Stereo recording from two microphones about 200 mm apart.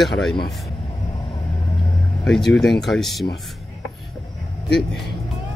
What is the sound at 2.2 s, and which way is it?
Speech, 5° left (ahead or behind).